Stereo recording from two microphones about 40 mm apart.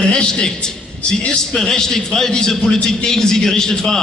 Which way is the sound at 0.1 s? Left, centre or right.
Left.